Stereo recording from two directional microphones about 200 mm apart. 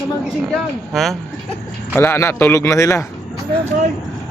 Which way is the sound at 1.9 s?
10° left (ahead or behind).